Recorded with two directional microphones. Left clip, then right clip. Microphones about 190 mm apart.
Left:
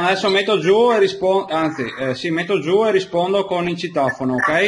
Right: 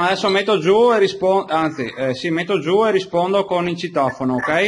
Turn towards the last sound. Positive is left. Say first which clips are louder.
# left 1 dB
turn(degrees=0)  # may be behind; listen again after turning